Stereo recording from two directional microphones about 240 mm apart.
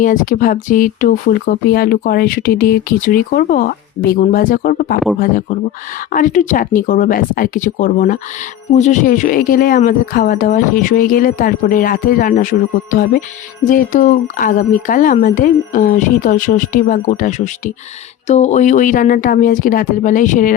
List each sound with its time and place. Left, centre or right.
0.0 s speech: left